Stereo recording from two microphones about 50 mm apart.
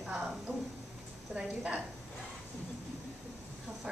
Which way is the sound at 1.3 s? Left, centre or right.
Right.